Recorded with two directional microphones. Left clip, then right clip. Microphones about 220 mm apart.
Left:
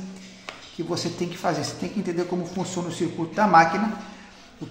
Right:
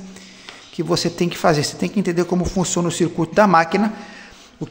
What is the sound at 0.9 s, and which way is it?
Speech, 45° right (ahead or behind).